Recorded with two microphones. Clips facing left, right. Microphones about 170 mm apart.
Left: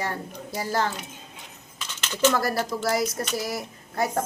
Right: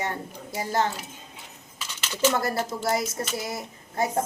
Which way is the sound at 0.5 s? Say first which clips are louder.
Right 1 dB; 25° right (ahead or behind).